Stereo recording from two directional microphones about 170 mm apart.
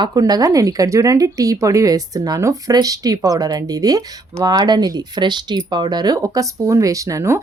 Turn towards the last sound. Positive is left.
turn(degrees=-15)  # may be behind; listen again after turning